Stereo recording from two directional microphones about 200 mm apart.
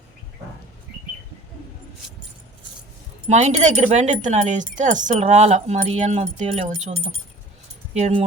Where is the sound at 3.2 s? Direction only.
35° right (ahead or behind).